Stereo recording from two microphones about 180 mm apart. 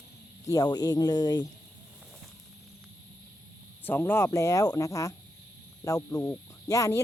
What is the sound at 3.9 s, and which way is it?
Speech, 10° left (ahead or behind).